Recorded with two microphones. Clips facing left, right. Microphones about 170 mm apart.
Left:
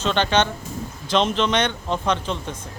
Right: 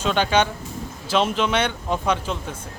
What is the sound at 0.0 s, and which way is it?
Speech, 10° right (ahead or behind).